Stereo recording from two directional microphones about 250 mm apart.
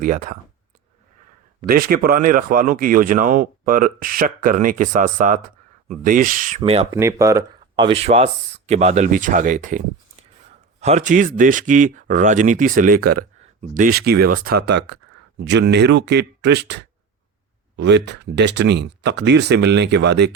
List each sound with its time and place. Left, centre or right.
0.0 s speech: right
1.6 s speech: right
6.6 s speech: right
7.0 s speech: centre; by 20.3 s right